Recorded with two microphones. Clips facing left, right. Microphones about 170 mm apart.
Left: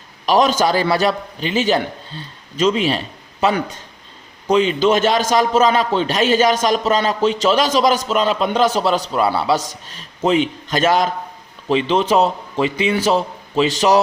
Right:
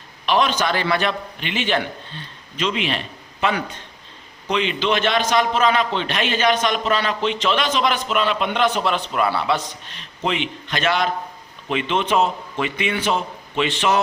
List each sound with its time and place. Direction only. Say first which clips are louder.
0.3 s a man's voice: left 5 dB; 40° left (ahead or behind)